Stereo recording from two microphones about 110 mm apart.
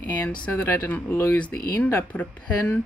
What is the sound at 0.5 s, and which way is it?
Speech, 20° left (ahead or behind).